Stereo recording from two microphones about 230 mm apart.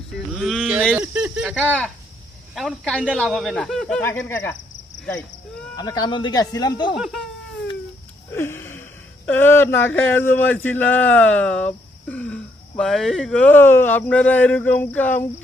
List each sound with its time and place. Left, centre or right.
0.3 s speech: centre
5.7 s a man's voice: centre
6.9 s speech: centre
8.3 s a sound: centre
10.0 s a man's voice: centre